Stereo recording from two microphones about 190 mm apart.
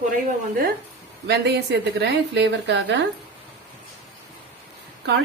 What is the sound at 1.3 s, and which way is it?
A woman's voice, 65° right (ahead or behind).